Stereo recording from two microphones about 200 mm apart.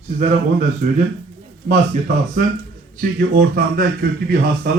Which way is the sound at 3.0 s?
50° right (ahead or behind).